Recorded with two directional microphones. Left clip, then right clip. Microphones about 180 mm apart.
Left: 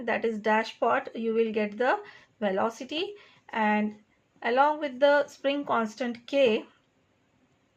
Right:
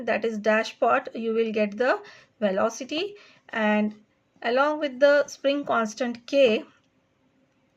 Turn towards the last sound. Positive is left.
turn(degrees=-30)  # may be behind; listen again after turning